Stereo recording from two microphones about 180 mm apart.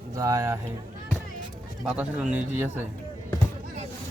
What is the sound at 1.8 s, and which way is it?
Speech, 5° right (ahead or behind).